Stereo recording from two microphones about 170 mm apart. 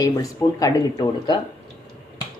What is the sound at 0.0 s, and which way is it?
Speech, 20° left (ahead or behind).